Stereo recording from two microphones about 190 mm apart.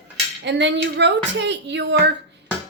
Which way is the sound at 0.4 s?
65° right (ahead or behind).